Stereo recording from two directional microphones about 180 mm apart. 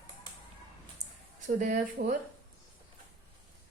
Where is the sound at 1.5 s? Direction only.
45° right (ahead or behind).